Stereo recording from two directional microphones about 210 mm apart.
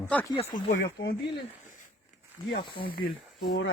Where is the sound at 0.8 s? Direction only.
55° left (ahead or behind).